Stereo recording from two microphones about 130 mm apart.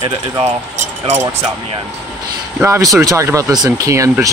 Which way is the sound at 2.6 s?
20° right (ahead or behind).